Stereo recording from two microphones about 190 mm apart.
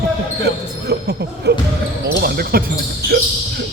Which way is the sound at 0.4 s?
60° right (ahead or behind).